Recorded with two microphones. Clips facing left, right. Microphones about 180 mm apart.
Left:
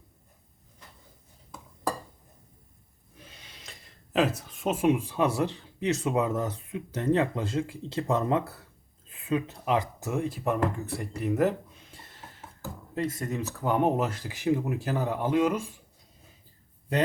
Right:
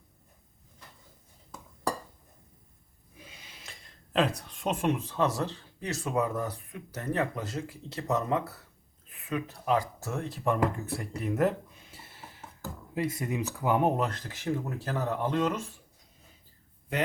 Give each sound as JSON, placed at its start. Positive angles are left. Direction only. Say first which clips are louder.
{"t": 3.2, "sound": "speech", "louder": "even", "side_deg": -10}